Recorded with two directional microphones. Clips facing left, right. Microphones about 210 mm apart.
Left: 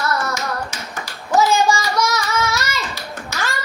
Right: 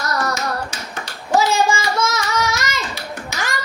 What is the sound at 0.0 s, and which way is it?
Tap, 35° right (ahead or behind).